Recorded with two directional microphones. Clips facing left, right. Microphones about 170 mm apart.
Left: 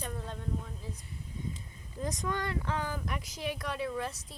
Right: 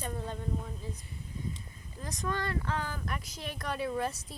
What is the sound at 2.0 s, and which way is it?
Speech, 15° left (ahead or behind).